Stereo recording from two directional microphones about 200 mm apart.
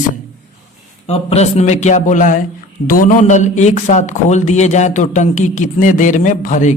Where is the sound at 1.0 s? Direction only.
30° left (ahead or behind).